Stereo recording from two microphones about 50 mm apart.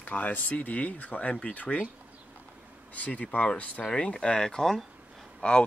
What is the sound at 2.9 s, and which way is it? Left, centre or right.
Speech, left.